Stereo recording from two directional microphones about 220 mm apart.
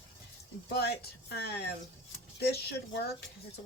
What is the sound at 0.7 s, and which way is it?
Speech, 45° left (ahead or behind).